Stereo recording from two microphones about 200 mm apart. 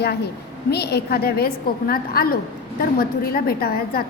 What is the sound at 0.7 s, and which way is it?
A woman's voice, 55° left (ahead or behind).